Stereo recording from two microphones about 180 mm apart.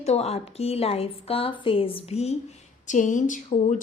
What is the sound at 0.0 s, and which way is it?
A woman's voice, 35° left (ahead or behind).